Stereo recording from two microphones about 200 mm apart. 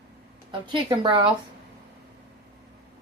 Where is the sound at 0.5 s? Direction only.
25° right (ahead or behind).